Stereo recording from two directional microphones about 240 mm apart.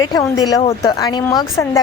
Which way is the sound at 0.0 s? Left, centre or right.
Centre.